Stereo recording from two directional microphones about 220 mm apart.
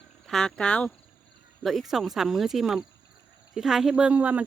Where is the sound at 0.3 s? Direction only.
5° left (ahead or behind).